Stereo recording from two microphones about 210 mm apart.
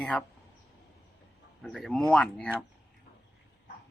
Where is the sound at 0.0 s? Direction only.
5° left (ahead or behind).